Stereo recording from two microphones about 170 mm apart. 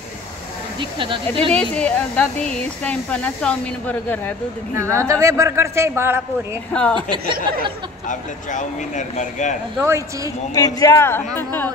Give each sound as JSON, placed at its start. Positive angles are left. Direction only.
{"t": 0.7, "sound": "speech", "side_deg": -30}
{"t": 1.5, "sound": "speech", "side_deg": 5}
{"t": 4.7, "sound": "a man's voice", "side_deg": -15}
{"t": 6.7, "sound": "a woman's voice", "side_deg": 5}
{"t": 7.0, "sound": "speech", "side_deg": -30}
{"t": 8.1, "sound": "speech", "side_deg": 50}
{"t": 9.8, "sound": "a man's voice", "side_deg": -15}
{"t": 10.5, "sound": "speech", "side_deg": 20}